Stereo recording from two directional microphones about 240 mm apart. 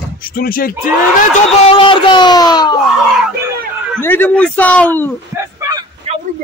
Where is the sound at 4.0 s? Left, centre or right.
Centre.